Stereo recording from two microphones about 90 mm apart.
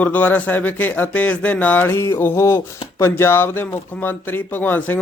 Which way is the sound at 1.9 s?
30° left (ahead or behind).